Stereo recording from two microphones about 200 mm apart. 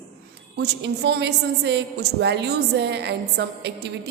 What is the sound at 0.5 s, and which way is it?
A woman's voice, 55° right (ahead or behind).